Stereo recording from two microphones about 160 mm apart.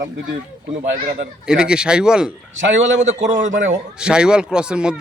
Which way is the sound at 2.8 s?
50° right (ahead or behind).